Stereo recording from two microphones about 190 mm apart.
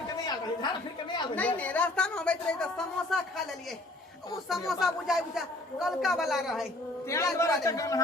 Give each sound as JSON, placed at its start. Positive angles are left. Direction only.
{"t": 0.3, "sound": "chatter", "side_deg": 25}
{"t": 1.4, "sound": "speech", "side_deg": 10}
{"t": 4.4, "sound": "speech", "side_deg": 0}
{"t": 7.3, "sound": "speech", "side_deg": 15}